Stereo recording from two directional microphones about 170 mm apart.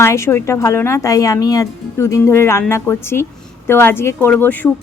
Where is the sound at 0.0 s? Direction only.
15° left (ahead or behind).